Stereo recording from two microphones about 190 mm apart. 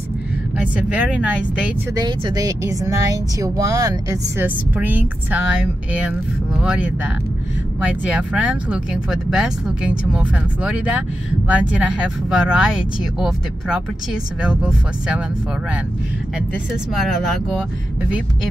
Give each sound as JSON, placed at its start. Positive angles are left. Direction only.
{"t": 0.6, "sound": "speech", "side_deg": -5}
{"t": 2.0, "sound": "speech", "side_deg": -20}
{"t": 6.5, "sound": "speech", "side_deg": -5}
{"t": 16.9, "sound": "speech", "side_deg": 0}